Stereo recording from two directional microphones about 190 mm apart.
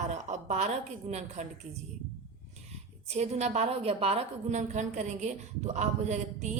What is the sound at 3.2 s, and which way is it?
A woman's voice, 35° right (ahead or behind).